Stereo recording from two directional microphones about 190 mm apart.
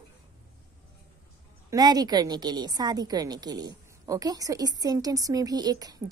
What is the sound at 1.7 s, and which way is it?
A woman's voice, 20° right (ahead or behind).